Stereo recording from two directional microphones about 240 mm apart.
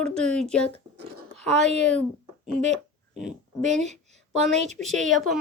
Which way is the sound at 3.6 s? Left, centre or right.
Right.